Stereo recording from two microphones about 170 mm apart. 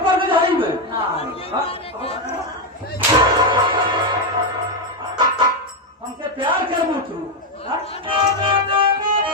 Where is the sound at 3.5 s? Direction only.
30° right (ahead or behind).